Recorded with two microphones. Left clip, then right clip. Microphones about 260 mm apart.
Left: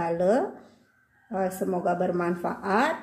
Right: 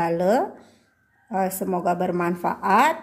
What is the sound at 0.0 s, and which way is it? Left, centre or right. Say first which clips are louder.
Speech: right 3 dB; right.